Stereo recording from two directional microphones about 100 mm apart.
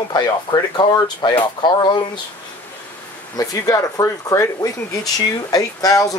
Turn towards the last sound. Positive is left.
turn(degrees=35)  # may be behind; listen again after turning